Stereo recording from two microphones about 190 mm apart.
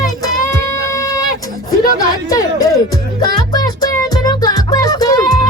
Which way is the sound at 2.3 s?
20° left (ahead or behind).